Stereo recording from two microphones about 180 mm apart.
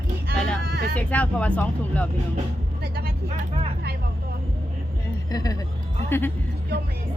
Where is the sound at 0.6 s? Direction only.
60° right (ahead or behind).